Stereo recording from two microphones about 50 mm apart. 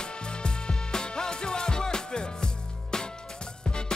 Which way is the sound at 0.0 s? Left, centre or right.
Centre.